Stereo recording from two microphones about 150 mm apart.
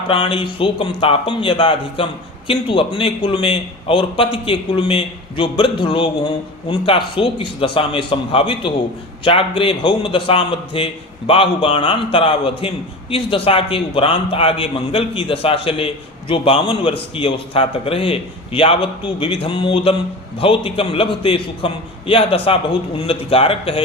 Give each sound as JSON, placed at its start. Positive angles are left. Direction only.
{"t": 0.1, "sound": "a man's voice", "side_deg": 35}